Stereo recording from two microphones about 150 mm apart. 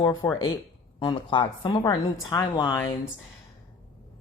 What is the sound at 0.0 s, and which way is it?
A woman's voice, 25° left (ahead or behind).